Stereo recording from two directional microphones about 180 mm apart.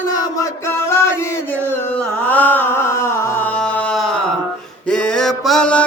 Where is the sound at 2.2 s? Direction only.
10° left (ahead or behind).